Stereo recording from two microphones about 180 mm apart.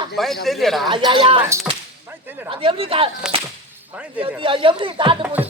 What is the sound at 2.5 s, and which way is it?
Speech, 30° right (ahead or behind).